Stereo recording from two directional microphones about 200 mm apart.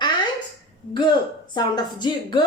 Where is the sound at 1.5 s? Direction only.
20° left (ahead or behind).